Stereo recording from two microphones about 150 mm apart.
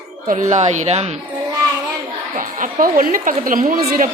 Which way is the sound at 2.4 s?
65° right (ahead or behind).